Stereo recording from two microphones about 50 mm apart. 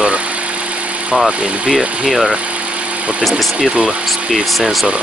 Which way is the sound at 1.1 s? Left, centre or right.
Centre.